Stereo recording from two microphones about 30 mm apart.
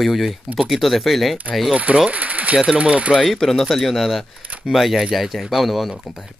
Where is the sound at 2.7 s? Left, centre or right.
Right.